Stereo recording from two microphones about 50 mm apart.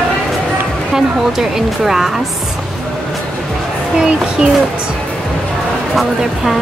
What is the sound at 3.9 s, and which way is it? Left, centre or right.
Speech, centre.